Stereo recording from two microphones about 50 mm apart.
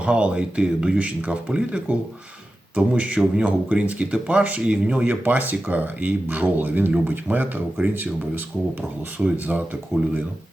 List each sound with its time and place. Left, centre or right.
0.0 s speech: right
5.2 s speech: right